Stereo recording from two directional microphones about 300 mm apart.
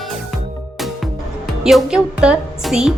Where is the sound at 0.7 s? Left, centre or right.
Centre.